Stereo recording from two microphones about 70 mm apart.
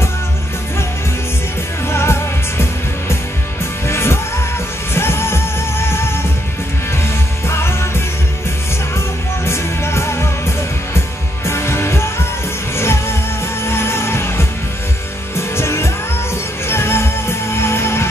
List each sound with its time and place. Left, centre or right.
1.9 s music: left
7.4 s music: left
8.9 s music: left